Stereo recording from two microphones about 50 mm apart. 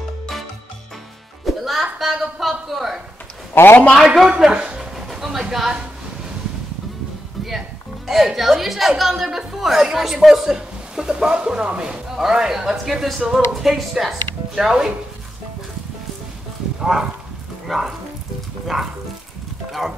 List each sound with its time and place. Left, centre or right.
1.4 s music: centre
2.0 s a sound: centre
2.4 s speech: centre
3.5 s a man's voice: left
4.0 s speech: centre
4.5 s speech: right
4.7 s a sound: centre
5.5 s speech: centre
8.1 s a woman's voice: centre
16.9 s speech: centre